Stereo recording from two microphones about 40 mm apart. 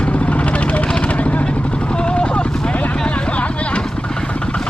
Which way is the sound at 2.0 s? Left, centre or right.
Left.